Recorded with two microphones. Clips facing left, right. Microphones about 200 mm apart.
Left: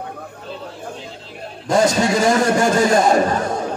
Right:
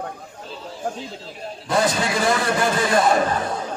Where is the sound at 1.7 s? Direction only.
45° left (ahead or behind).